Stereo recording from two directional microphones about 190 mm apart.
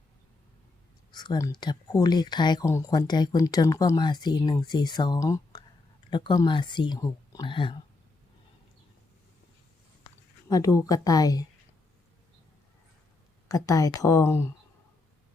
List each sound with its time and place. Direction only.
1.1 s speech: 20° left (ahead or behind)
10.5 s speech: 20° left (ahead or behind)
13.5 s speech: 20° left (ahead or behind)